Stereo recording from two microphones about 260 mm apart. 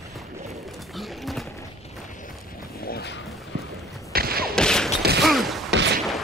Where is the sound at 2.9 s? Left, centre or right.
Left.